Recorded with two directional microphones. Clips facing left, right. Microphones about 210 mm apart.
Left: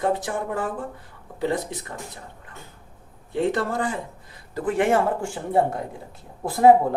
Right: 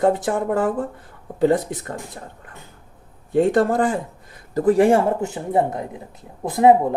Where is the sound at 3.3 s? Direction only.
50° right (ahead or behind).